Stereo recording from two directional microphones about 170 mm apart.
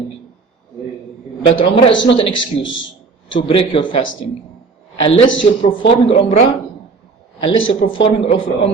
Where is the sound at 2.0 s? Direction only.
35° left (ahead or behind).